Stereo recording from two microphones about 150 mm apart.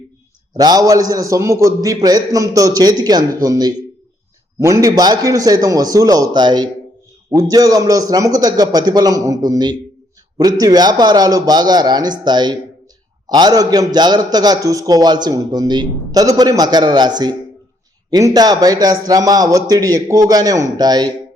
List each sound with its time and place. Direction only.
0.5 s a man's voice: 25° right (ahead or behind)